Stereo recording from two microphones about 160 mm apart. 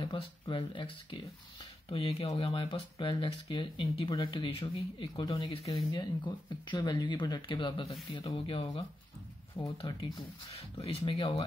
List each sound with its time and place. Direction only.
0.0 s speech: 30° left (ahead or behind)